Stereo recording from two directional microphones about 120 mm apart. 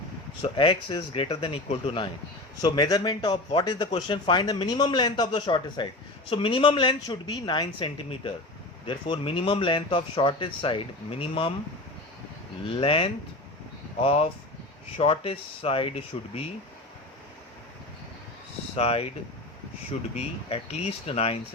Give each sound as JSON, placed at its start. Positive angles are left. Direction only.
{"t": 0.5, "sound": "speech", "side_deg": 45}
{"t": 2.6, "sound": "a man's voice", "side_deg": 35}
{"t": 12.7, "sound": "speech", "side_deg": 50}
{"t": 18.8, "sound": "speech", "side_deg": 55}
{"t": 20.1, "sound": "speech", "side_deg": 60}